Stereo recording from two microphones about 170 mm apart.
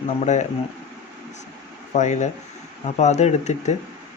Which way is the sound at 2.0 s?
45° left (ahead or behind).